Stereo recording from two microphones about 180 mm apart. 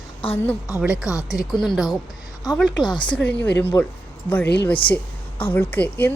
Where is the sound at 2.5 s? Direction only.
20° left (ahead or behind).